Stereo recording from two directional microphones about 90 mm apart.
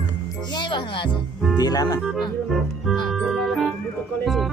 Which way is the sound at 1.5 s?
45° left (ahead or behind).